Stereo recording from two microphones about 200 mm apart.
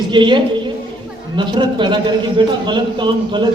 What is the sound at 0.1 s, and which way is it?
A man's voice, 25° right (ahead or behind).